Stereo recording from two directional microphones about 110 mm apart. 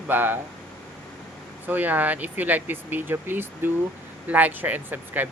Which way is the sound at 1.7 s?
15° right (ahead or behind).